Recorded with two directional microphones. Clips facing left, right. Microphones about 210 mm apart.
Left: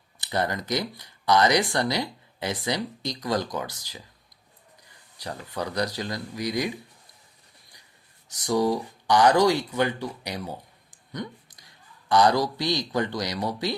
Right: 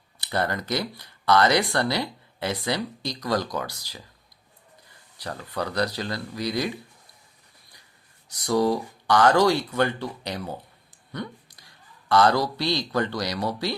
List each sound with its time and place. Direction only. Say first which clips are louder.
0.2 s speech: even; 15° left (ahead or behind)
5.2 s speech: right 1 dB; 15° left (ahead or behind)
8.3 s speech: right 1 dB; 15° left (ahead or behind)